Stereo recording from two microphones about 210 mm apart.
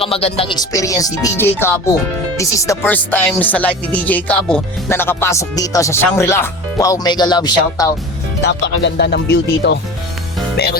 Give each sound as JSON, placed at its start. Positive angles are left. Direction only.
{"t": 0.0, "sound": "speech", "side_deg": 30}
{"t": 8.4, "sound": "speech", "side_deg": 55}